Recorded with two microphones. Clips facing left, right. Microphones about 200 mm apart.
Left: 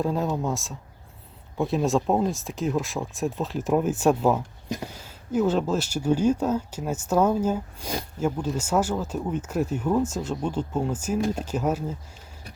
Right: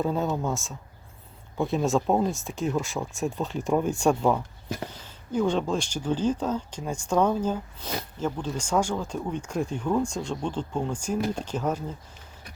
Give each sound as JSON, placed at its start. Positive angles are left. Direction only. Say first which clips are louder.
{"t": 0.0, "sound": "speech", "louder": "left 1 dB", "side_deg": 0}